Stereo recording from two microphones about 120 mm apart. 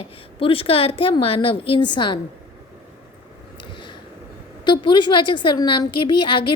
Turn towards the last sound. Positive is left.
turn(degrees=45)  # may be behind; listen again after turning